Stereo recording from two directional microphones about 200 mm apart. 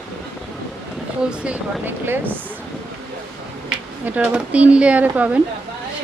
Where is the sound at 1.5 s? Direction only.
10° right (ahead or behind).